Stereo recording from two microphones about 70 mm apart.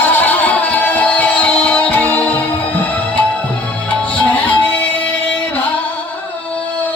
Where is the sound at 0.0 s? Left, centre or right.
Left.